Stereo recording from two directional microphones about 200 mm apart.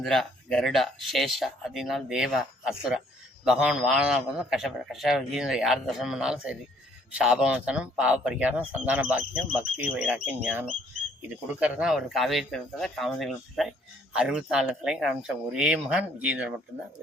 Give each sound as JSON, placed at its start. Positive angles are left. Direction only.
{"t": 0.0, "sound": "speech", "side_deg": 0}